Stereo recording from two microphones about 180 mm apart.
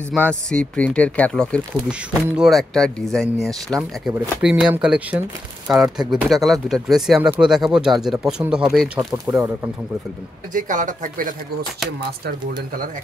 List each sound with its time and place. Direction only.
0.1 s speech: 5° left (ahead or behind)
10.5 s speech: 45° right (ahead or behind)